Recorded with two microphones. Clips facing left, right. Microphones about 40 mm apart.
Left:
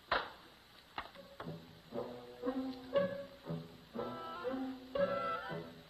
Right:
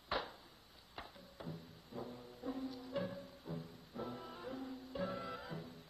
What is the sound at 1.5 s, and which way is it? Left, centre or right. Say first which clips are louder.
Music: left 5 dB; left.